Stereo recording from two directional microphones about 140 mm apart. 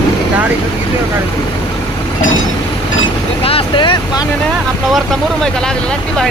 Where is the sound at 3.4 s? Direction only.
40° left (ahead or behind).